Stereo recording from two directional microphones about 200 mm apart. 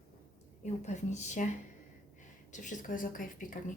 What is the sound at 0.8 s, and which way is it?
Speech, 35° left (ahead or behind).